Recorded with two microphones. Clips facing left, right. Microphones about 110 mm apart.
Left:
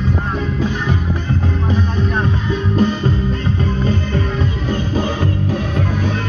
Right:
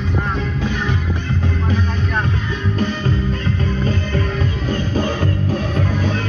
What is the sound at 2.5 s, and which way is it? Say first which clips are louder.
Music: left 7 dB; 25° left (ahead or behind).